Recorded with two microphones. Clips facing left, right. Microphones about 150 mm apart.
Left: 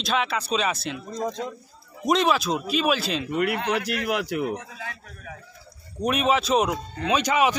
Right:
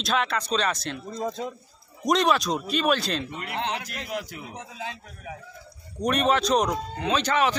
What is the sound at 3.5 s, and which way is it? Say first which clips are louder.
Speech: left 4 dB; 25° right (ahead or behind).